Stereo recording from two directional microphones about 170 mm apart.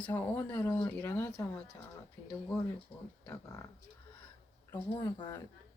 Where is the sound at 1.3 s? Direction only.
5° left (ahead or behind).